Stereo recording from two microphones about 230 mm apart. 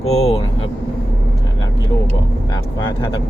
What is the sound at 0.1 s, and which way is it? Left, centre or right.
Speech, left.